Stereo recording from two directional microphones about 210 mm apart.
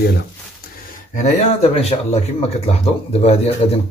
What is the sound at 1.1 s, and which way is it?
Speech, 30° left (ahead or behind).